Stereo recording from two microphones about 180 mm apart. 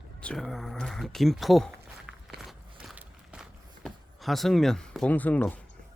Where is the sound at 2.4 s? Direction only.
Centre (ahead or behind).